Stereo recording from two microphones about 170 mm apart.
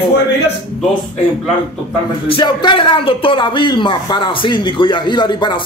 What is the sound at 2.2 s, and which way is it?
Speech, 30° left (ahead or behind).